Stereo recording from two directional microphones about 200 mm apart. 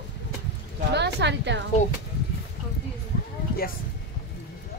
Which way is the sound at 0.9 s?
60° right (ahead or behind).